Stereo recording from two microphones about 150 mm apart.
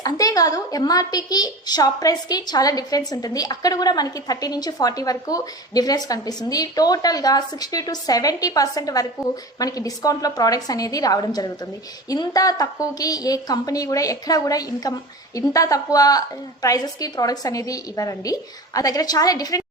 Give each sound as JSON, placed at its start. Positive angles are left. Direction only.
{"t": 0.0, "sound": "a woman's voice", "side_deg": 25}